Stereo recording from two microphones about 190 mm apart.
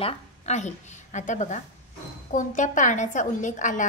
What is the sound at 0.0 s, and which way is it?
A woman's voice, 35° left (ahead or behind).